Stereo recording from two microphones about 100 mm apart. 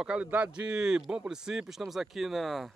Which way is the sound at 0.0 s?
10° right (ahead or behind).